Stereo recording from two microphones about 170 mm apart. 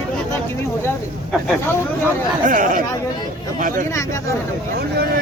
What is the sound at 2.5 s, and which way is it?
Speech, 50° right (ahead or behind).